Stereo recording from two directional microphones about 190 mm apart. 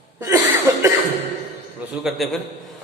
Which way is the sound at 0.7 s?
15° right (ahead or behind).